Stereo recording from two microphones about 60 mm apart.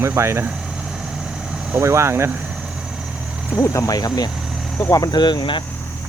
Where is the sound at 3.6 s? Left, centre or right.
Left.